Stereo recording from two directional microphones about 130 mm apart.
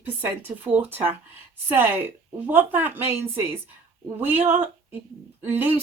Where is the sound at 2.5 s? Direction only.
15° right (ahead or behind).